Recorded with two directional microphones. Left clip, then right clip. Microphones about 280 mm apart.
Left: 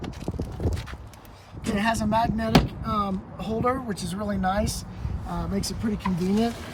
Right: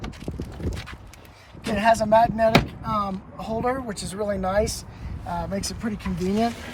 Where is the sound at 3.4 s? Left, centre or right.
Centre.